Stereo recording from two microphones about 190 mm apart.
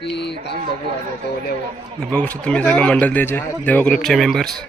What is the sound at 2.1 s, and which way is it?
Speech, 5° left (ahead or behind).